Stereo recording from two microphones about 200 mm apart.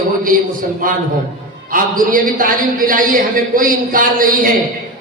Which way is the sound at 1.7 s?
45° right (ahead or behind).